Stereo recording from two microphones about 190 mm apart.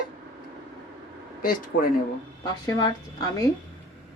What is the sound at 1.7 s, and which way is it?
Speech, 70° left (ahead or behind).